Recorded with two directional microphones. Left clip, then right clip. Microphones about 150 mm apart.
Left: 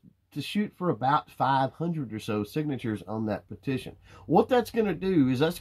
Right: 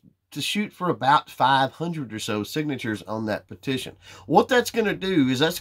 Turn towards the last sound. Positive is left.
turn(degrees=-5)  # may be behind; listen again after turning